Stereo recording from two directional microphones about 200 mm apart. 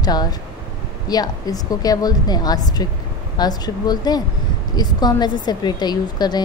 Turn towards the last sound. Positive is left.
turn(degrees=20)  # may be behind; listen again after turning